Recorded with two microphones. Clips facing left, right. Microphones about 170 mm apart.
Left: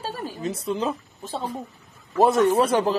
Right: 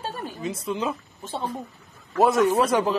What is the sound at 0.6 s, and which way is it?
Speech, 35° left (ahead or behind).